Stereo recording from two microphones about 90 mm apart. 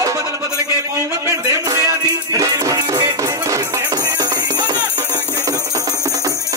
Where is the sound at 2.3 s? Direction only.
35° right (ahead or behind).